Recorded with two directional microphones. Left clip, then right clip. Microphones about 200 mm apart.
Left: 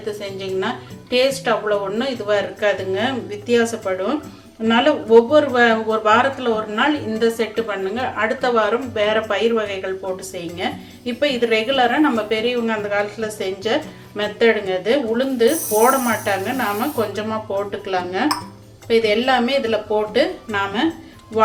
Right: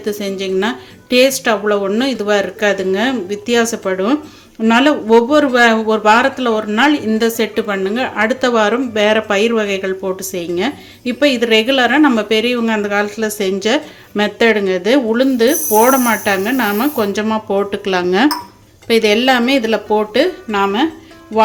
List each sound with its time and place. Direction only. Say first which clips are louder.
0.0 s a woman's voice: right 6 dB; 55° right (ahead or behind)